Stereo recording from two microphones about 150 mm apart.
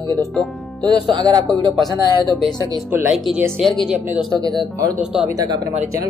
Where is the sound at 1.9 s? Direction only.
30° left (ahead or behind).